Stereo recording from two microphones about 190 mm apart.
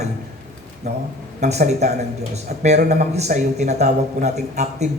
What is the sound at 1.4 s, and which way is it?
Speech, 35° right (ahead or behind).